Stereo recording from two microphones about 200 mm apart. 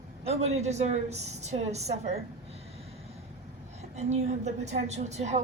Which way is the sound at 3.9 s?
35° right (ahead or behind).